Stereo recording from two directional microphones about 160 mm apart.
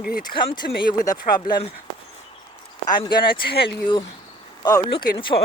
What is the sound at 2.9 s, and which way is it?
Speech, 30° left (ahead or behind).